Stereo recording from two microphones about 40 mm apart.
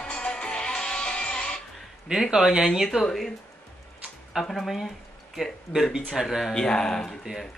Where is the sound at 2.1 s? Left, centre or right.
Centre.